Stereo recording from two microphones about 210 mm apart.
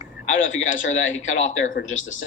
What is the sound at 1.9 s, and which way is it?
Speech, 65° left (ahead or behind).